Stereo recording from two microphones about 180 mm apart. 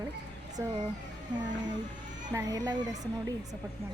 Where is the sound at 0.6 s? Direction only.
15° right (ahead or behind).